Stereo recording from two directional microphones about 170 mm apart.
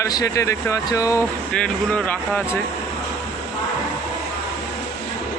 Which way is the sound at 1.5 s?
5° left (ahead or behind).